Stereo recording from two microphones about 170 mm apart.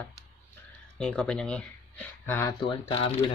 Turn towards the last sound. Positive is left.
turn(degrees=30)  # may be behind; listen again after turning